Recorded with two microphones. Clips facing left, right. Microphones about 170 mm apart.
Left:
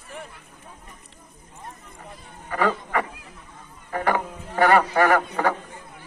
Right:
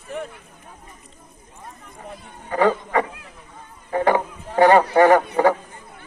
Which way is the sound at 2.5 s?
15° right (ahead or behind).